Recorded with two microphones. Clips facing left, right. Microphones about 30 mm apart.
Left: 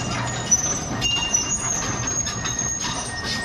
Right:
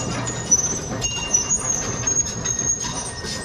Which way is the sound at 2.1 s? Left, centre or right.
Left.